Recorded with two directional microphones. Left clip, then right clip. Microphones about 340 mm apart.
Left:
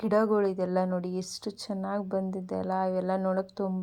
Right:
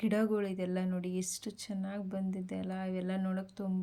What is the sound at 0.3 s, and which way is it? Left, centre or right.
Speech, left.